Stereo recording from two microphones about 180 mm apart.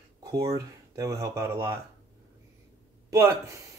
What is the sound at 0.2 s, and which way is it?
Speech, 20° right (ahead or behind).